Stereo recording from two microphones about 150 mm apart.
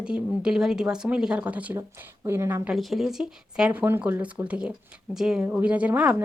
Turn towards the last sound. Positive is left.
turn(degrees=-10)  # may be behind; listen again after turning